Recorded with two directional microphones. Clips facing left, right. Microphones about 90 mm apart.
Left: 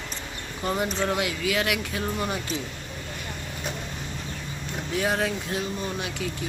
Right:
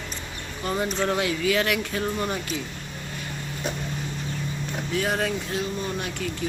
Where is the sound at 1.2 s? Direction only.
10° left (ahead or behind).